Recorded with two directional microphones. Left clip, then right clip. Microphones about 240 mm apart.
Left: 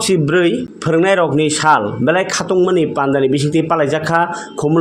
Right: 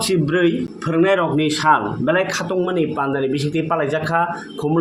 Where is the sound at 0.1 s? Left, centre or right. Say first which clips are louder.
Left 5 dB; left.